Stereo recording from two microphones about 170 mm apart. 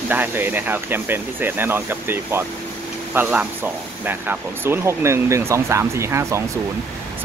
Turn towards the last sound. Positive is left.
turn(degrees=-15)  # may be behind; listen again after turning